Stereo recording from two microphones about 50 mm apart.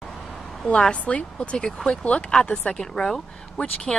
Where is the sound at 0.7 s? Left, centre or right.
Left.